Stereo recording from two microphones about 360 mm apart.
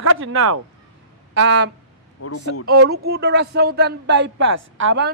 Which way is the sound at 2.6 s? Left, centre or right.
Right.